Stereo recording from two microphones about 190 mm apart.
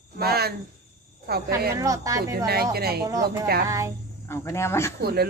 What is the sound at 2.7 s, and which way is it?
Speech, 55° right (ahead or behind).